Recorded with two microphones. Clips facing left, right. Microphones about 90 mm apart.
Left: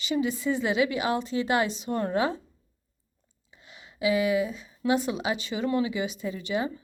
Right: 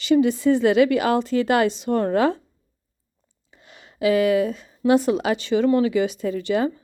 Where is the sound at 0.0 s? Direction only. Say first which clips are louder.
Right 9 dB; 70° right (ahead or behind).